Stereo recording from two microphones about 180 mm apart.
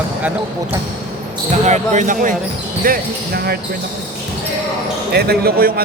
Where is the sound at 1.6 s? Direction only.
40° right (ahead or behind); by 3.5 s 55° right (ahead or behind).